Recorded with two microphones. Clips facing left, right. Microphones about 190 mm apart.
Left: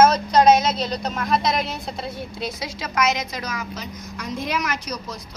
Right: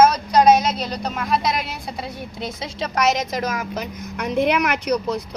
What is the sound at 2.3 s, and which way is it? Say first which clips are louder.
A woman's voice: right 2 dB; 25° right (ahead or behind).